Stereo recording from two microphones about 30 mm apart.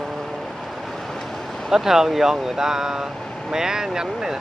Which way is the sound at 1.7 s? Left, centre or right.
Centre.